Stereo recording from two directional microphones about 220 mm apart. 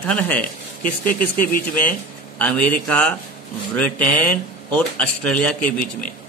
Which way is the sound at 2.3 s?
5° left (ahead or behind).